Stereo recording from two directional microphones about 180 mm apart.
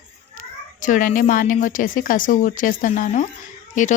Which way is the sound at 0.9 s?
50° left (ahead or behind).